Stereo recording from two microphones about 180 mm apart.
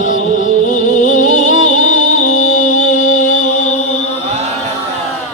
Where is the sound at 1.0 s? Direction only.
45° left (ahead or behind).